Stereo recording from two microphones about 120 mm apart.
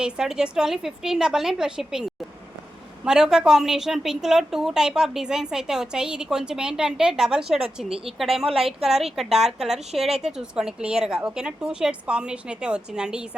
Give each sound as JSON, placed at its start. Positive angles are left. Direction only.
{"t": 0.0, "sound": "a woman's voice", "side_deg": -5}
{"t": 8.4, "sound": "a woman's voice", "side_deg": -50}
{"t": 8.8, "sound": "a woman's voice", "side_deg": -5}